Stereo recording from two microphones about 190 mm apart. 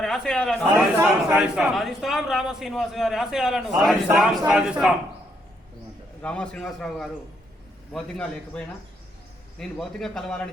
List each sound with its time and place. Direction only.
0.0 s a man's voice: centre (ahead or behind)
6.2 s a man's voice: 5° left (ahead or behind)